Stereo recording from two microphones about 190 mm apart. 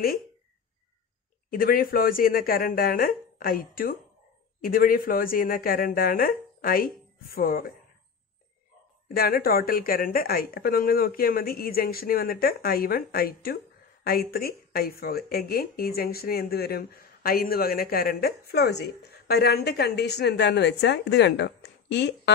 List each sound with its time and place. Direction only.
1.5 s speech: 50° left (ahead or behind)
9.1 s speech: 55° left (ahead or behind)